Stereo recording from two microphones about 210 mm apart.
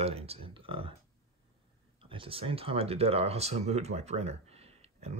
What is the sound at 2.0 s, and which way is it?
Speech, 25° right (ahead or behind).